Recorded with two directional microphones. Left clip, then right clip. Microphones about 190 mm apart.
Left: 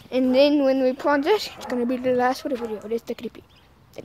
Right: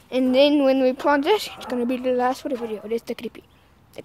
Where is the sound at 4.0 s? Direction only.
5° right (ahead or behind).